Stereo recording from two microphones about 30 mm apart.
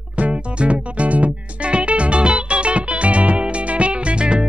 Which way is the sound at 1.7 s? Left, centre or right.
Right.